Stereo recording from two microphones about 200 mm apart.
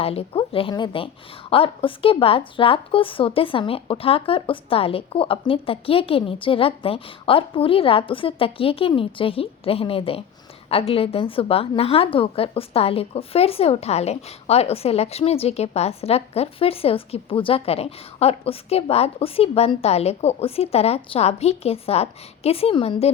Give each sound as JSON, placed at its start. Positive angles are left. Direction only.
{"t": 0.0, "sound": "a woman's voice", "side_deg": 30}